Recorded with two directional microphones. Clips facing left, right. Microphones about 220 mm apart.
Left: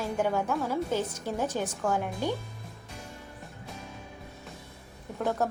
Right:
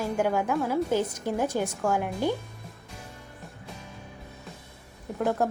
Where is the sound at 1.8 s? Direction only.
Centre (ahead or behind).